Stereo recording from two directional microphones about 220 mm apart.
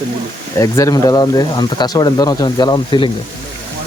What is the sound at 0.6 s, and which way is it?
Speech, 15° left (ahead or behind).